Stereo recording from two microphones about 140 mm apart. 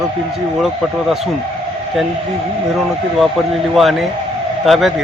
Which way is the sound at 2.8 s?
Centre (ahead or behind).